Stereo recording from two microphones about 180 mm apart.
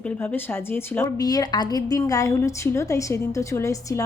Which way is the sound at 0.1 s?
10° left (ahead or behind).